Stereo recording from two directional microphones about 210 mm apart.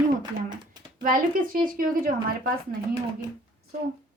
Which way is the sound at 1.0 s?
40° right (ahead or behind).